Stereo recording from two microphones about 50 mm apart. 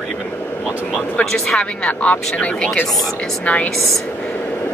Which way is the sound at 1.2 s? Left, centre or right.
Centre.